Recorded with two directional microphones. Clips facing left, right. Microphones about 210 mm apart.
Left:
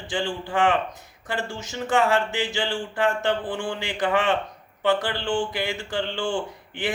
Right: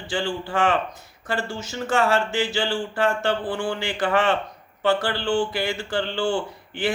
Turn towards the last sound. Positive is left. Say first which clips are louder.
# right 2 dB
turn(degrees=15)  # may be behind; listen again after turning